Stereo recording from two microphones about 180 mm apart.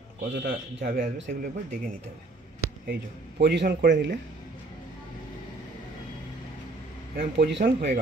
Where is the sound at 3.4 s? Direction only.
70° right (ahead or behind).